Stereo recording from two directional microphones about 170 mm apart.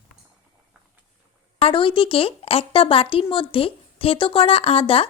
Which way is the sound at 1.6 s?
30° left (ahead or behind).